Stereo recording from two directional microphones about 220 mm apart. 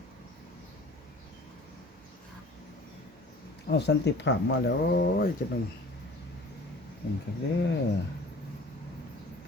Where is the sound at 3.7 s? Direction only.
50° left (ahead or behind).